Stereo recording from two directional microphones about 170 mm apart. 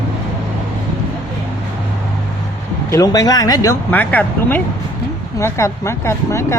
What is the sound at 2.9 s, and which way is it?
Speech, 20° left (ahead or behind).